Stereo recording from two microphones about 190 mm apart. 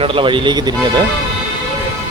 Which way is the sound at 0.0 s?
30° right (ahead or behind).